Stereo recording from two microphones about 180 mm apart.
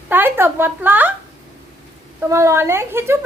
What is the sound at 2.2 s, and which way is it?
Speech, 15° right (ahead or behind).